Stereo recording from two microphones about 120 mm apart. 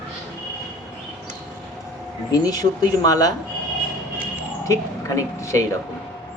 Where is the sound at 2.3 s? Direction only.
30° left (ahead or behind).